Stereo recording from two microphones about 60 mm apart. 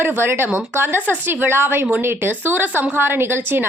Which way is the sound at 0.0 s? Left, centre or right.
Right.